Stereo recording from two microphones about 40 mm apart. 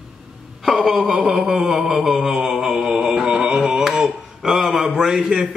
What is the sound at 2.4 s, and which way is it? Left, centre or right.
Mantra, centre.